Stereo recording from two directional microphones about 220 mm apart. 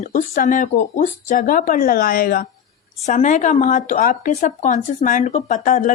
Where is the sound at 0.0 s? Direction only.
35° left (ahead or behind).